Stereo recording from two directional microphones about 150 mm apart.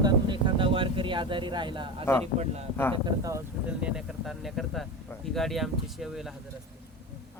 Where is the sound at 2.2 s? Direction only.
45° right (ahead or behind).